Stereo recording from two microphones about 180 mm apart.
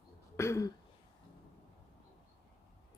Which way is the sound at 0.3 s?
15° left (ahead or behind).